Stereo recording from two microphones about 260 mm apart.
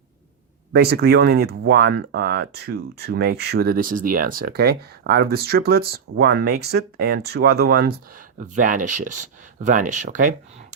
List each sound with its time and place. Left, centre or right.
0.7 s speech: right